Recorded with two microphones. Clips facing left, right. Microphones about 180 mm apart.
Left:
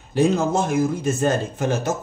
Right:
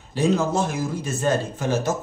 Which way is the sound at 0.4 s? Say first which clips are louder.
Left 3 dB; 50° left (ahead or behind).